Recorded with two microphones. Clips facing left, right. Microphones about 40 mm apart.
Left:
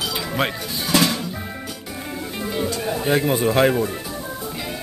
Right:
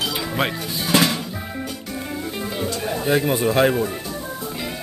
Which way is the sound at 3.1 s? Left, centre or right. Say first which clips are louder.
Even; centre.